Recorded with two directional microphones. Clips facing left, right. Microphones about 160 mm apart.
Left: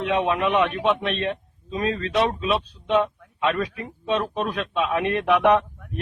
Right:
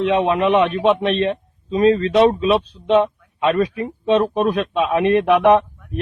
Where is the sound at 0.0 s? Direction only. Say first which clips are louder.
Right 6 dB; 25° right (ahead or behind).